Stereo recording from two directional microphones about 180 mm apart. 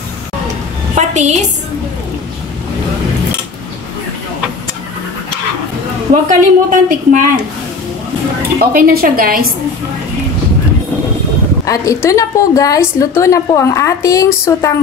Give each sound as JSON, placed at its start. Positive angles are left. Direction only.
{"t": 0.9, "sound": "a sound", "side_deg": -40}
{"t": 6.2, "sound": "speech", "side_deg": -45}
{"t": 8.5, "sound": "a woman's voice", "side_deg": -55}
{"t": 11.6, "sound": "a woman's voice", "side_deg": 15}